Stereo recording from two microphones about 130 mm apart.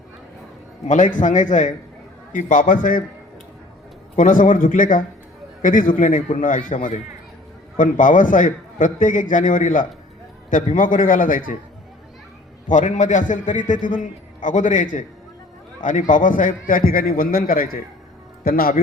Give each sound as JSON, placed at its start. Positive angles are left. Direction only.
{"t": 0.9, "sound": "a man's voice", "side_deg": 80}
{"t": 2.3, "sound": "a man's voice", "side_deg": 90}
{"t": 4.1, "sound": "a man's voice", "side_deg": 80}
{"t": 7.8, "sound": "a man's voice", "side_deg": 90}
{"t": 12.6, "sound": "a man's voice", "side_deg": 70}